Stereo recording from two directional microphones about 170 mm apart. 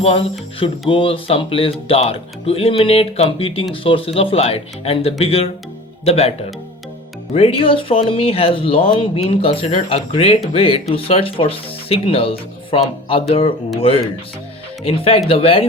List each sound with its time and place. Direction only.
0.6 s speech: 30° left (ahead or behind)
7.3 s speech: 35° left (ahead or behind)